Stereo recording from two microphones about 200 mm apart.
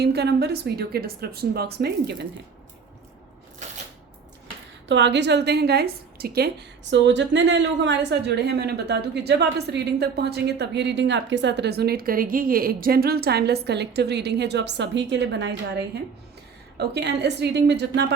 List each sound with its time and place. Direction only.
0.0 s a woman's voice: 55° right (ahead or behind)
4.9 s a woman's voice: 60° right (ahead or behind)